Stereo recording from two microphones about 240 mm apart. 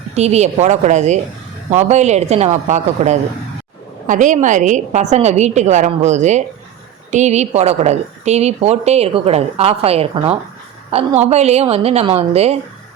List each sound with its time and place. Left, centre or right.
0.1 s a woman's voice: right